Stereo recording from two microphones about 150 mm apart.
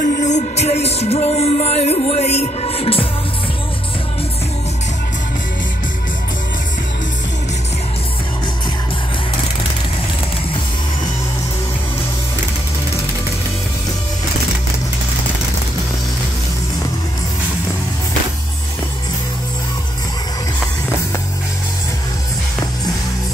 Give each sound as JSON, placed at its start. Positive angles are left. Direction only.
{"t": 0.0, "sound": "music", "side_deg": 60}